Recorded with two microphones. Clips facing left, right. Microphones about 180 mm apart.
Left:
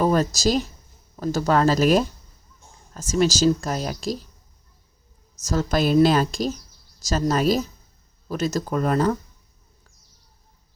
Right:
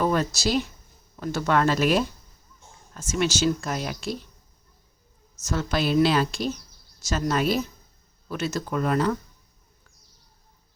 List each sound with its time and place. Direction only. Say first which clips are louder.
0.0 s a sound: left 3 dB; 40° left (ahead or behind)
0.3 s speech: left 3 dB; 40° left (ahead or behind)
5.5 s speech: left 4 dB; 40° left (ahead or behind)